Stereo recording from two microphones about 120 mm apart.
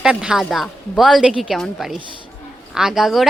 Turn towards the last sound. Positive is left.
turn(degrees=0)  # may be behind; listen again after turning